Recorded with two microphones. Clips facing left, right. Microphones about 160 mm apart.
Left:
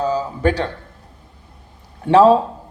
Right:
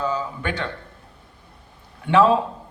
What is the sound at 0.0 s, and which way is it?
Speech, 35° left (ahead or behind).